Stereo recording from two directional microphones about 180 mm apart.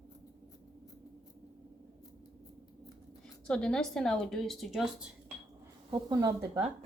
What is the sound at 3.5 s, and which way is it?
A woman's voice, 5° left (ahead or behind).